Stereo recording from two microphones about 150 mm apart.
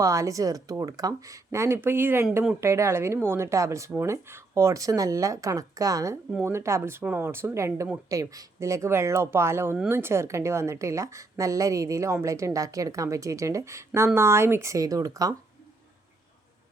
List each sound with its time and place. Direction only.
0.0 s a woman's voice: 20° right (ahead or behind)